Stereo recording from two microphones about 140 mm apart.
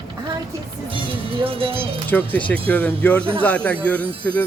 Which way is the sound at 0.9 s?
40° right (ahead or behind).